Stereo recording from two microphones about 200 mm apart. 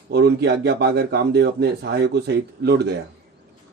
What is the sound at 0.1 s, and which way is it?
A man's voice, 55° right (ahead or behind).